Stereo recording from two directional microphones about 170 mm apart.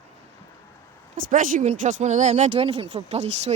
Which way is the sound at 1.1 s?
50° right (ahead or behind).